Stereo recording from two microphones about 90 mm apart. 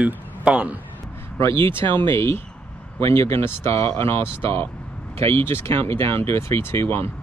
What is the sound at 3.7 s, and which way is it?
Speech, 90° right.